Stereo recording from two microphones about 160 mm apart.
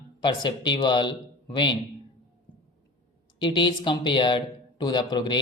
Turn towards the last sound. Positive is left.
turn(degrees=30)  # may be behind; listen again after turning